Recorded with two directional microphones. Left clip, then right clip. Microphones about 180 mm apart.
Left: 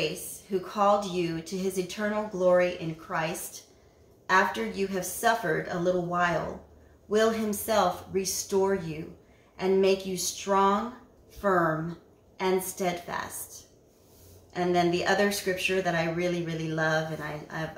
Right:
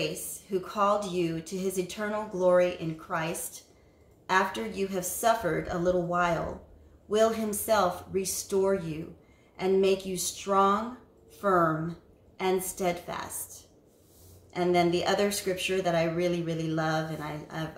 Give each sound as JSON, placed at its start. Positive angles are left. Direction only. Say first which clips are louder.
{"t": 0.0, "sound": "a woman's voice", "louder": "left 2 dB", "side_deg": -15}
{"t": 12.4, "sound": "a woman's voice", "louder": "left 1 dB", "side_deg": -15}